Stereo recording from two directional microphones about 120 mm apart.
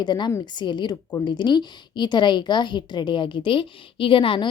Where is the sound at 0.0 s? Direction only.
40° left (ahead or behind).